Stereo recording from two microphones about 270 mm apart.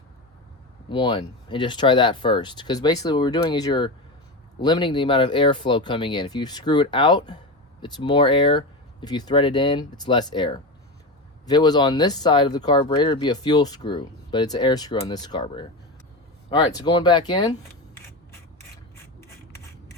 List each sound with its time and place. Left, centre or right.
0.9 s speech: centre